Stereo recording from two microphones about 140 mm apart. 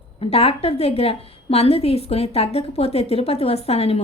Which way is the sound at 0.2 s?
45° left (ahead or behind).